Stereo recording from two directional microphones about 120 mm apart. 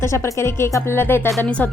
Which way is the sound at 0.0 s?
25° left (ahead or behind).